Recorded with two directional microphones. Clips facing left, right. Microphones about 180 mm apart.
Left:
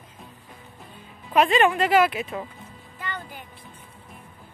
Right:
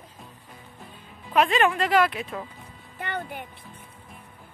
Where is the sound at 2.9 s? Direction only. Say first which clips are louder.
Right 4 dB; 65° right (ahead or behind).